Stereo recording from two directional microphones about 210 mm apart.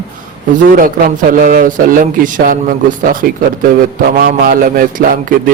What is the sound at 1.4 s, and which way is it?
A man's voice, 40° right (ahead or behind).